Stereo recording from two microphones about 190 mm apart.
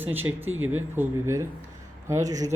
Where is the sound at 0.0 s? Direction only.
10° right (ahead or behind).